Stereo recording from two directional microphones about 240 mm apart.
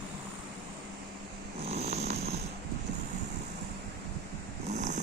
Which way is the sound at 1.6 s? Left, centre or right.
Right.